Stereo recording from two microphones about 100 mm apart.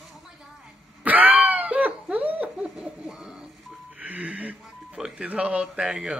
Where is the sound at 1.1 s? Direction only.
15° right (ahead or behind).